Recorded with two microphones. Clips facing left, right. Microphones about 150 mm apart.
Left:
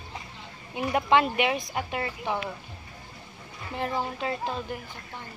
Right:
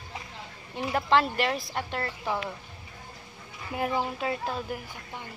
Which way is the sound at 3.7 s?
5° right (ahead or behind).